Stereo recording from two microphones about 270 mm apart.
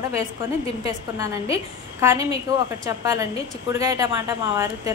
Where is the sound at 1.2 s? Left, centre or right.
Centre.